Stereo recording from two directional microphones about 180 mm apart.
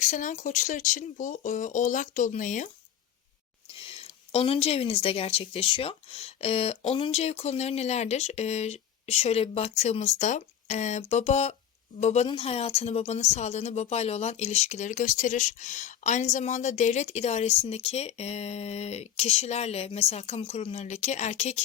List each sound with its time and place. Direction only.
0.0 s speech: 45° left (ahead or behind)
3.7 s speech: 30° left (ahead or behind)